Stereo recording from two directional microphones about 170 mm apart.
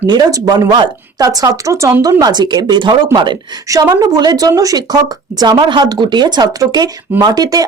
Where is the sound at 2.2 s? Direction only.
25° right (ahead or behind).